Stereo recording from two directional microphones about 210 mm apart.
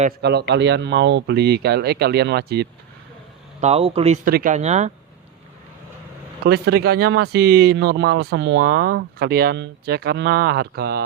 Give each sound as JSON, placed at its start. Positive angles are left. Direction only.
{"t": 0.2, "sound": "speech", "side_deg": -50}
{"t": 3.6, "sound": "speech", "side_deg": -30}
{"t": 4.3, "sound": "speech", "side_deg": -40}
{"t": 6.4, "sound": "speech", "side_deg": -50}